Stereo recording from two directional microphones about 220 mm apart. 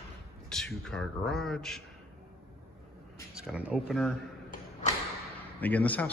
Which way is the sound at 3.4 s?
5° right (ahead or behind).